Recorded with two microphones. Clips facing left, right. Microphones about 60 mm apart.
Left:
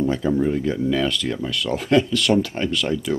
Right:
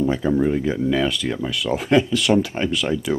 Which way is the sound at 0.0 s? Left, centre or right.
Centre.